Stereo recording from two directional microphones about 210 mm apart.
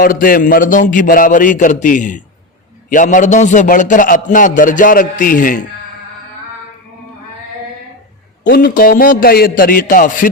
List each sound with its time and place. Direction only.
0.0 s a man's voice: 40° left (ahead or behind)
8.4 s a man's voice: 45° left (ahead or behind)